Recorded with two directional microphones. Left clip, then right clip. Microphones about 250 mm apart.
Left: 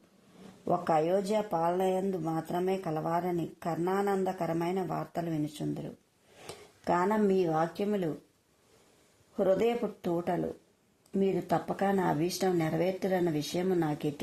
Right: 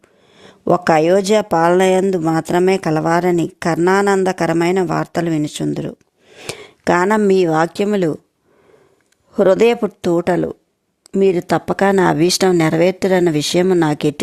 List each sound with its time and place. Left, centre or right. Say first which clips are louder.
0.6 s speech: right 15 dB; right
9.3 s speech: right 15 dB; right